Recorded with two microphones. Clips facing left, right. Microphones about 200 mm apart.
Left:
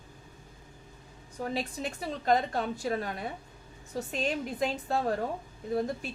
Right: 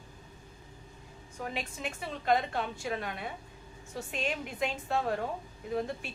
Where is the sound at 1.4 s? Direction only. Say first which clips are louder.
Left 4 dB; 35° left (ahead or behind).